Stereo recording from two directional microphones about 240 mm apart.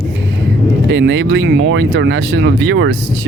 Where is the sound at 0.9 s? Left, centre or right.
Right.